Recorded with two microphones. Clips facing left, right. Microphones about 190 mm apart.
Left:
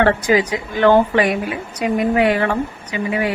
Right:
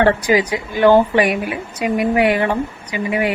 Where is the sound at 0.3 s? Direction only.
10° right (ahead or behind).